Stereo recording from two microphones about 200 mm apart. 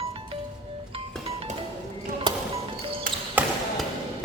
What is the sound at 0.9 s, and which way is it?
Music, 25° right (ahead or behind).